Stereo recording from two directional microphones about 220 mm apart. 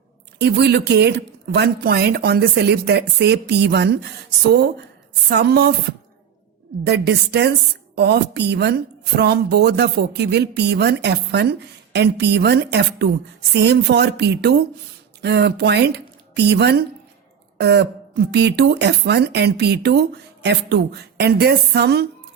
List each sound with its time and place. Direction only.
0.3 s a woman's voice: 50° right (ahead or behind)
5.3 s a woman's voice: 50° right (ahead or behind)
6.8 s a woman's voice: 50° right (ahead or behind)